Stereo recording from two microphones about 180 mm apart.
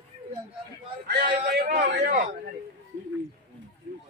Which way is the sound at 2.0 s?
45° right (ahead or behind).